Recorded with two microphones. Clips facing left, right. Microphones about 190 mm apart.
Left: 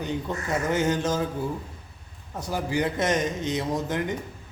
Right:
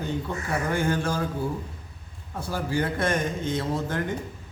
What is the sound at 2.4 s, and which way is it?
A man's voice, 15° left (ahead or behind).